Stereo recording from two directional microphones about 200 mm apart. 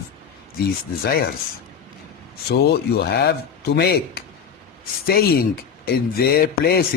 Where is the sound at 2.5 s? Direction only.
55° left (ahead or behind).